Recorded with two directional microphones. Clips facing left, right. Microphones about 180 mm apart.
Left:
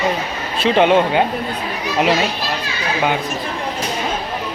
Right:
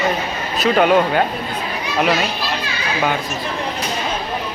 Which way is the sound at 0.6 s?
25° left (ahead or behind).